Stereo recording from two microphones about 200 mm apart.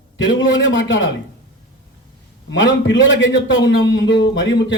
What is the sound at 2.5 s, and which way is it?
Speech, 70° left (ahead or behind).